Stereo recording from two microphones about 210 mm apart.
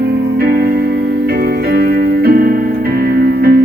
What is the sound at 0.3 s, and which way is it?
Music, 45° right (ahead or behind).